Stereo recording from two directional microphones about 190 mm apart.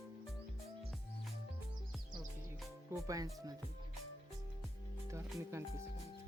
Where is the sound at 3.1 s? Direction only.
15° right (ahead or behind).